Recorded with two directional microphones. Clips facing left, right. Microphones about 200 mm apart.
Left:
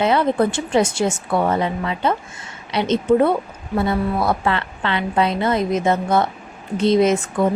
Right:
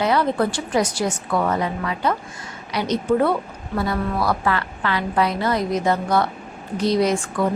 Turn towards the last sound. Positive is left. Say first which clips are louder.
# left 3 dB
turn(degrees=20)  # may be behind; listen again after turning